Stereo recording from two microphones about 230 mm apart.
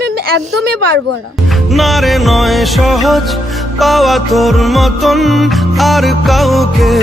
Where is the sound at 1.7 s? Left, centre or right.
Centre.